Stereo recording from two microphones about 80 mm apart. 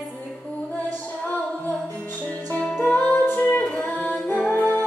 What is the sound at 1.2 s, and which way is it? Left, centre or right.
Music, centre.